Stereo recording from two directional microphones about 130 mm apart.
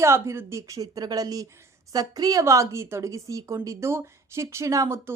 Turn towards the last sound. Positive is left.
turn(degrees=-25)  # may be behind; listen again after turning